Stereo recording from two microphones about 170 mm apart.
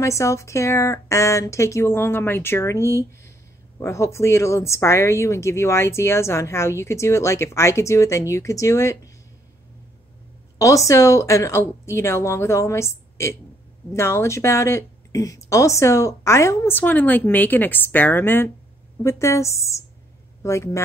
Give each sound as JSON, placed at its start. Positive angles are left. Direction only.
{"t": 0.0, "sound": "speech", "side_deg": 15}
{"t": 10.6, "sound": "speech", "side_deg": 20}